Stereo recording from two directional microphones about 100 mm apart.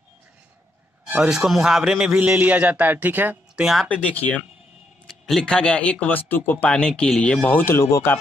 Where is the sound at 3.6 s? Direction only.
Centre (ahead or behind).